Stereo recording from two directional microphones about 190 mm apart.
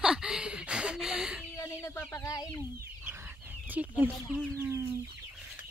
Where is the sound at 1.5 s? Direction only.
15° left (ahead or behind).